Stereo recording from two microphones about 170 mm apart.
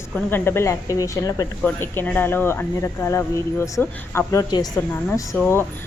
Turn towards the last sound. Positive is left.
turn(degrees=15)  # may be behind; listen again after turning